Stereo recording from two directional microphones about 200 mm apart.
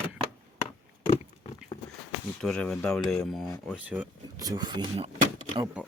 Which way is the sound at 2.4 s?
5° left (ahead or behind).